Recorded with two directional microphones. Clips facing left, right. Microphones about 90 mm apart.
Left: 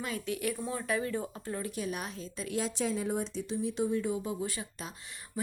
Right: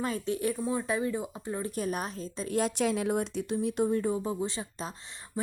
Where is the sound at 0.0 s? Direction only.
35° right (ahead or behind).